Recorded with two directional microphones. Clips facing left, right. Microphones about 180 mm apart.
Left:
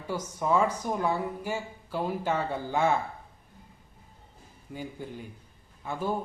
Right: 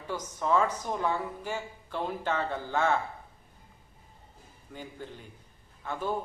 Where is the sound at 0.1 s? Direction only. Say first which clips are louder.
Left 1 dB; 10° left (ahead or behind).